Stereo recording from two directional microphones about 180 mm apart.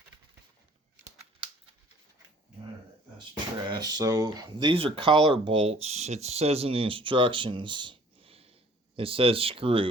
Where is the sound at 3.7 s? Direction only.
20° right (ahead or behind).